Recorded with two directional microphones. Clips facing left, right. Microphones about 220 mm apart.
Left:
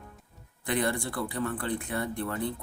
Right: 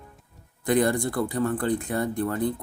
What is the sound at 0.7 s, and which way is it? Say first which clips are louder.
Speech: right 7 dB; 40° right (ahead or behind).